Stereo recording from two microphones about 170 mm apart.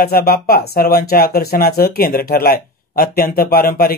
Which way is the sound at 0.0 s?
60° left (ahead or behind).